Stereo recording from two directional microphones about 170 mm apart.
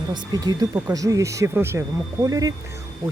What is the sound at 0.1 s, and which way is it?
Speech, 25° right (ahead or behind).